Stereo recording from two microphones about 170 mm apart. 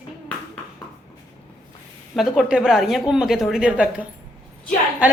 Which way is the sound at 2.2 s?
Centre (ahead or behind).